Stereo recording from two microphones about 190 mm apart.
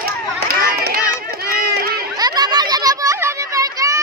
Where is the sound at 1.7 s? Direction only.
55° right (ahead or behind).